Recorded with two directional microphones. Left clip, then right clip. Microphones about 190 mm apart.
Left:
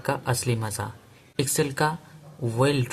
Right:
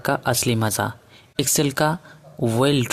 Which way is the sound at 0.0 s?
45° right (ahead or behind).